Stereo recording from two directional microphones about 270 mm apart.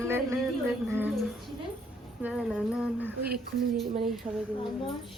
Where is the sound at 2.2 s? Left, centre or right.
Centre.